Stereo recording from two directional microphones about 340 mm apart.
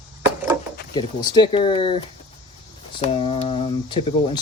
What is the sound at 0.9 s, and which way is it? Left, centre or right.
Speech, centre.